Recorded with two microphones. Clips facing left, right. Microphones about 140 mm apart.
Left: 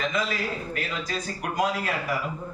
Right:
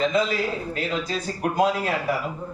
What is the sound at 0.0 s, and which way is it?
A man's voice, 30° right (ahead or behind).